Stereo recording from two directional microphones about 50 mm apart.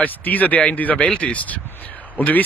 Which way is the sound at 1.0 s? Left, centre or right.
Left.